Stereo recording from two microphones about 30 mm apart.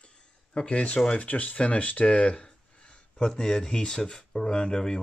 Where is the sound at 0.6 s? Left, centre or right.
Left.